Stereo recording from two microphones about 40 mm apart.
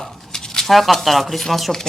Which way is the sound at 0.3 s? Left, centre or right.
Centre.